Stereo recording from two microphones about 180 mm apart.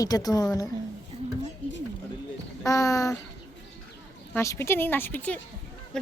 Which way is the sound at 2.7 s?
20° left (ahead or behind).